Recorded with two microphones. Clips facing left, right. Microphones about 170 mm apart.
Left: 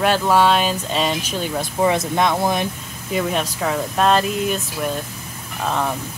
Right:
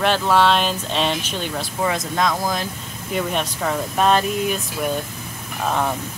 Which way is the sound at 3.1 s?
5° left (ahead or behind).